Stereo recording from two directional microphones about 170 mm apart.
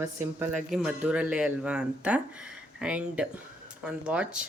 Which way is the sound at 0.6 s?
5° right (ahead or behind).